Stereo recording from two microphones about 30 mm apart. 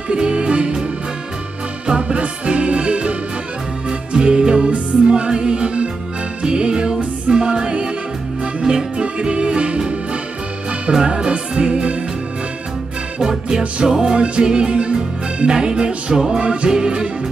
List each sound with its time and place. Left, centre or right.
0.1 s music: right
2.0 s music: right
4.6 s music: right
5.1 s music: right
9.3 s music: right
11.1 s music: right
13.2 s music: centre
14.1 s music: right